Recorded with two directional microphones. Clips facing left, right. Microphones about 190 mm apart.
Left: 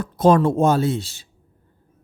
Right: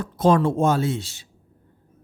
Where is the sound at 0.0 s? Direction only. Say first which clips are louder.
Left 3 dB; 45° left (ahead or behind).